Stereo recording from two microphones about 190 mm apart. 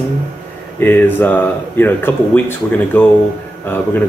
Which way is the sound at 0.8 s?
10° left (ahead or behind).